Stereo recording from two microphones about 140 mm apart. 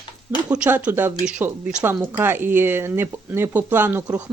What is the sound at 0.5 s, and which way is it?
Speech, 10° right (ahead or behind).